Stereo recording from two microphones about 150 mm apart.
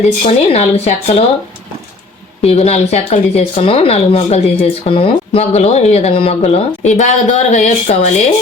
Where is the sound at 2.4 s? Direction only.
45° left (ahead or behind).